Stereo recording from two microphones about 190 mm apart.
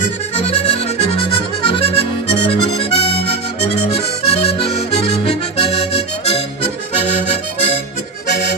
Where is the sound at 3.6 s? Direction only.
35° left (ahead or behind).